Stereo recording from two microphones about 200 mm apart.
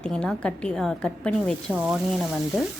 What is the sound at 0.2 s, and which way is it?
A woman's voice, 5° left (ahead or behind).